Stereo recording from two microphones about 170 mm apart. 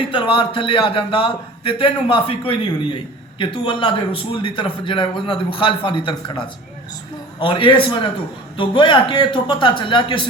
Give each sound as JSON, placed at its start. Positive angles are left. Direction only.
{"t": 0.0, "sound": "a man's voice", "side_deg": 30}